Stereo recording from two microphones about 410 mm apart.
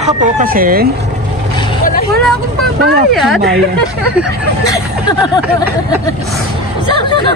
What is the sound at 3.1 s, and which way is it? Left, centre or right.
Speech, centre.